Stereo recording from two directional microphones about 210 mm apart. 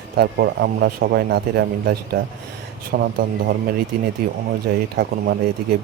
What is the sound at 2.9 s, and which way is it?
Speech, 45° right (ahead or behind).